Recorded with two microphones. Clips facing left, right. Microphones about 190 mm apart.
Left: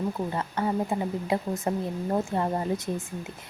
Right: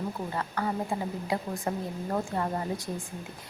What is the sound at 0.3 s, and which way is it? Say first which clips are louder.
A woman's voice: left 2 dB; 20° left (ahead or behind).